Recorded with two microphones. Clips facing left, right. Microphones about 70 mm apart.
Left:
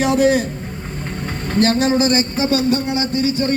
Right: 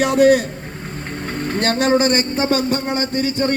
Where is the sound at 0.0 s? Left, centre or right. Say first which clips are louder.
Right 2 dB; right.